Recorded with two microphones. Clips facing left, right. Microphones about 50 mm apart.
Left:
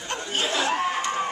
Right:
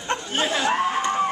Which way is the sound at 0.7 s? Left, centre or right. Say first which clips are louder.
Right 3 dB; centre.